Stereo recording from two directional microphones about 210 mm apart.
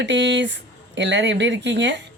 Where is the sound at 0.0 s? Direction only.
55° right (ahead or behind).